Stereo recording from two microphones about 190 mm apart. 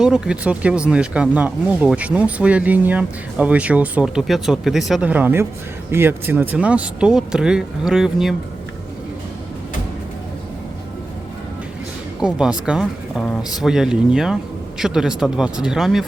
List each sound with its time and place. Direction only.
0.0 s speech: 5° right (ahead or behind)
12.2 s speech: 5° right (ahead or behind)